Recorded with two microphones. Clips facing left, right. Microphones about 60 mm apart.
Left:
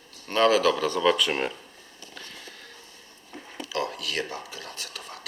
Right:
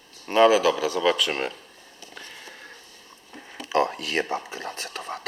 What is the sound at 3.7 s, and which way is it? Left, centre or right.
Speech, right.